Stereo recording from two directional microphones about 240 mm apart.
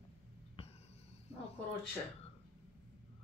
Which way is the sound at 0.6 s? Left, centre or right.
Left.